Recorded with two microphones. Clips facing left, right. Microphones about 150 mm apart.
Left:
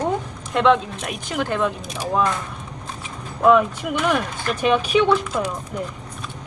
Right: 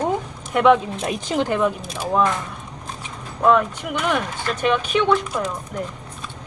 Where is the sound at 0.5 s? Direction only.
10° right (ahead or behind).